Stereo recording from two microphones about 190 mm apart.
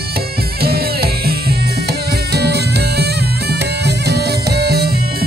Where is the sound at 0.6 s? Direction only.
55° right (ahead or behind).